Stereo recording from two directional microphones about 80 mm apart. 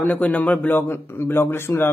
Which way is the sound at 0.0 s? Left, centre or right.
Centre.